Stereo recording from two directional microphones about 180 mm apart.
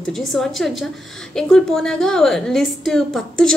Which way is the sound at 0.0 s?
Centre (ahead or behind).